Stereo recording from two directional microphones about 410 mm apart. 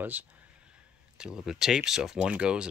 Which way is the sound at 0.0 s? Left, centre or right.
Centre.